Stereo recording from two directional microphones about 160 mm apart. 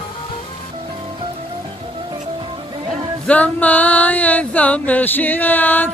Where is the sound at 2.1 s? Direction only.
30° right (ahead or behind).